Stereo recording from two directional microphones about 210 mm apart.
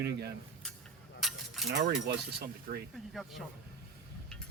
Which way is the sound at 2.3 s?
50° right (ahead or behind).